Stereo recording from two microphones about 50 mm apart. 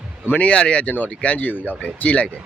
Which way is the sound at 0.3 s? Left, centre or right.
Left.